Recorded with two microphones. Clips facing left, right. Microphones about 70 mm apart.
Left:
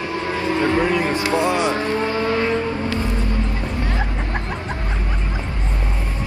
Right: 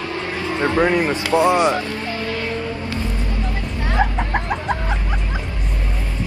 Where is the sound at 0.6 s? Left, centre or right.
Right.